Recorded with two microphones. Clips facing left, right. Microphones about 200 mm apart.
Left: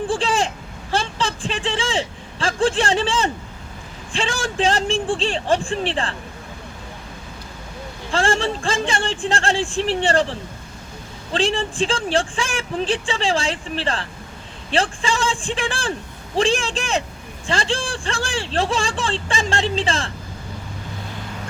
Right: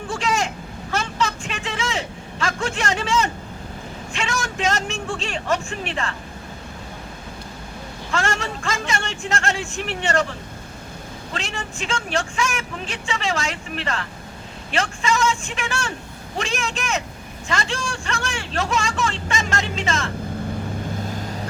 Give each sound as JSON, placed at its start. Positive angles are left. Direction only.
{"t": 0.1, "sound": "a sound", "side_deg": 30}
{"t": 4.1, "sound": "speech", "side_deg": 30}
{"t": 8.1, "sound": "speech", "side_deg": 30}